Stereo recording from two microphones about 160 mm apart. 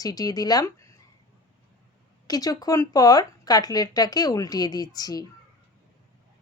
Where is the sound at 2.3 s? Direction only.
25° left (ahead or behind).